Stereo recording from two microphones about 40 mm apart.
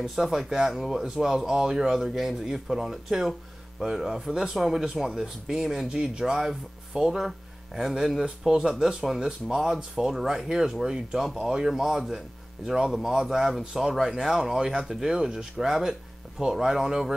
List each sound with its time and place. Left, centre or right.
0.0 s a man's voice: centre
6.2 s speech: centre
8.2 s a man's voice: centre
8.7 s speech: centre